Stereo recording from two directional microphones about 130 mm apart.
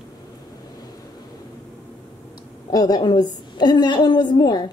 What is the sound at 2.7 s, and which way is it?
A woman's voice, 30° left (ahead or behind).